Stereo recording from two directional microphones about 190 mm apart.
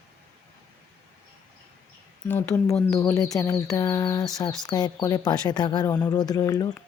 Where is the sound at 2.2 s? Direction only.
10° left (ahead or behind).